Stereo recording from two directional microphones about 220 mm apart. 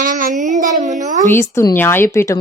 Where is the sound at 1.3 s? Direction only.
10° left (ahead or behind).